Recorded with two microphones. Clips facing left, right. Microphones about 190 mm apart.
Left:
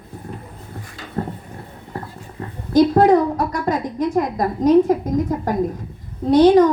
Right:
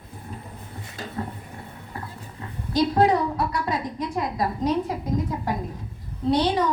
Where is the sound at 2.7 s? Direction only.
50° left (ahead or behind).